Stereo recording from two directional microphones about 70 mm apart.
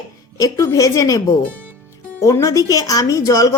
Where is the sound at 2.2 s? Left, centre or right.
Left.